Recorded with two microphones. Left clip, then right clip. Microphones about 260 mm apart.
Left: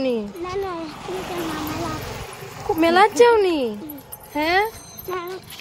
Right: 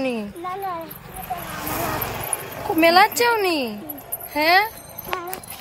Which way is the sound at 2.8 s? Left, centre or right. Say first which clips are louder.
Left 1 dB; centre.